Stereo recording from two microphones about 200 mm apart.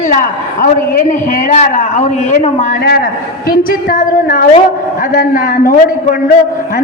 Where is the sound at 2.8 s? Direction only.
50° left (ahead or behind).